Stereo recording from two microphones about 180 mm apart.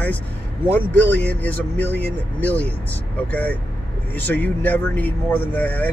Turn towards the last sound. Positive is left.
turn(degrees=10)  # may be behind; listen again after turning